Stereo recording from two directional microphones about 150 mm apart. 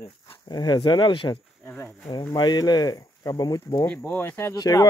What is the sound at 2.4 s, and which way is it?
Speech, 25° left (ahead or behind).